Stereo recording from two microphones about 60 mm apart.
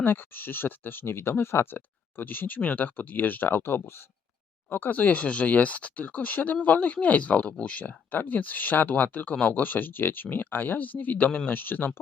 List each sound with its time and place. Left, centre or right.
0.0 s speech: left
4.7 s speech: left
11.5 s speech: left